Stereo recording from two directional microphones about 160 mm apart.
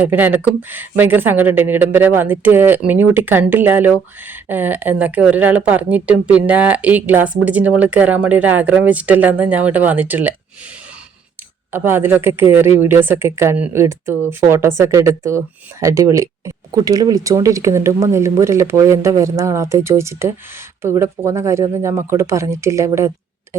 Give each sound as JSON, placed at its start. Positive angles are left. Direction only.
{"t": 0.0, "sound": "speech", "side_deg": -10}
{"t": 11.7, "sound": "speech", "side_deg": -15}